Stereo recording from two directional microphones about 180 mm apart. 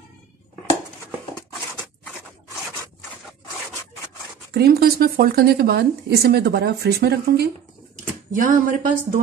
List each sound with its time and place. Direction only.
4.6 s speech: 60° right (ahead or behind)
8.3 s speech: 50° right (ahead or behind)